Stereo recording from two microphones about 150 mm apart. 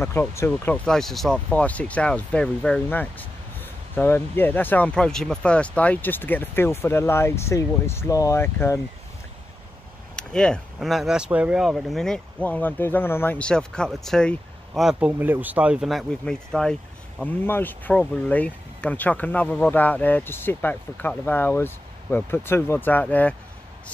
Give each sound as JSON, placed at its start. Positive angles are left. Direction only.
{"t": 0.0, "sound": "speech", "side_deg": 15}
{"t": 0.5, "sound": "speech", "side_deg": 5}
{"t": 10.1, "sound": "speech", "side_deg": 5}